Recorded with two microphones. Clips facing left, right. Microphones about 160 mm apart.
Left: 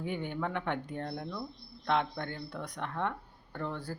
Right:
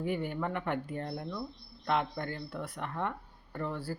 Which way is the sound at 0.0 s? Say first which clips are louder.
Right 2 dB; 5° right (ahead or behind).